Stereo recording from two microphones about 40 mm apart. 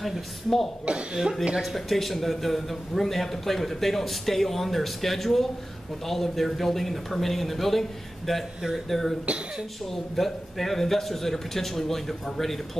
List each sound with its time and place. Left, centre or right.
0.0 s a man's voice: centre
0.9 s speech: right
1.6 s a man's voice: centre
9.2 s speech: right
10.1 s a man's voice: centre